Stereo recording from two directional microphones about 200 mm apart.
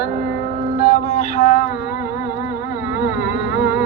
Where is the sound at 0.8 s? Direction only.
40° left (ahead or behind).